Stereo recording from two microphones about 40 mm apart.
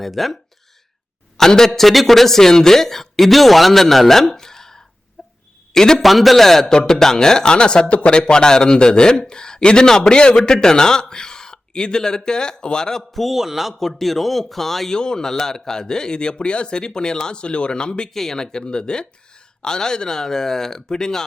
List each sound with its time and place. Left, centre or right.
0.0 s a man's voice: centre
1.4 s a man's voice: centre
5.2 s wail: centre
5.7 s a man's voice: centre
6.0 s a man's voice: centre; by 8.2 s left
8.2 s a man's voice: centre
13.0 s a man's voice: centre
13.7 s a man's voice: centre
14.9 s speech: centre
18.1 s a man's voice: centre
18.4 s a man's voice: left